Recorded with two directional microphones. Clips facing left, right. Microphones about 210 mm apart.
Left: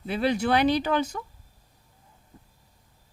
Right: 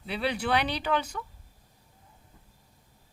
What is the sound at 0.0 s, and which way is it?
A woman's voice, 45° left (ahead or behind).